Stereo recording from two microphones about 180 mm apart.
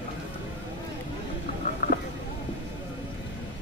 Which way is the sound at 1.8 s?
50° left (ahead or behind).